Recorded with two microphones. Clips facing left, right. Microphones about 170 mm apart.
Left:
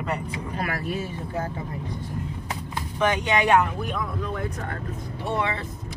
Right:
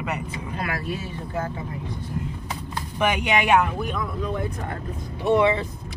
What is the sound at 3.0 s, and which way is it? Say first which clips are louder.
Speech: even; 10° right (ahead or behind).